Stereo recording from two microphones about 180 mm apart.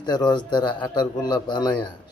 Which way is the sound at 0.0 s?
25° left (ahead or behind).